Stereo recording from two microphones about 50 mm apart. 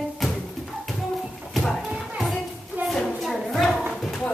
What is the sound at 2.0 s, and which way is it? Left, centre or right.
Children playing, centre.